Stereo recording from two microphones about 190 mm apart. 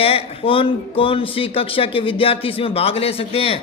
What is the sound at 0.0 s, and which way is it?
Speech, 30° left (ahead or behind).